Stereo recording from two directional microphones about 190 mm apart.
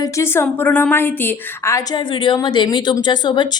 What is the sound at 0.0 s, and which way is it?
A woman's voice, 15° left (ahead or behind).